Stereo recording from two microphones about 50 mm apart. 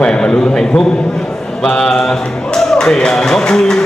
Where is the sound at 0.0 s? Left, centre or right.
Centre.